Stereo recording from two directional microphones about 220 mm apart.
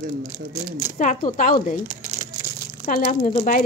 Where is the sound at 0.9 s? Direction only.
35° left (ahead or behind).